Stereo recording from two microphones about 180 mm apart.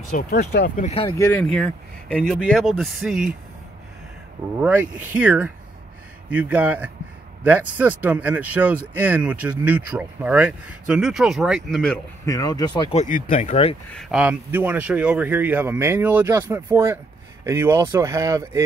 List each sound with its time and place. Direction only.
0.1 s speech: 60° left (ahead or behind)
0.8 s speech: 30° left (ahead or behind)
1.1 s speech: 15° left (ahead or behind)
1.4 s speech: 5° left (ahead or behind)
4.6 s speech: 10° right (ahead or behind)
12.3 s speech: 20° left (ahead or behind)
12.9 s speech: 45° left (ahead or behind)
13.9 s speech: centre (ahead or behind)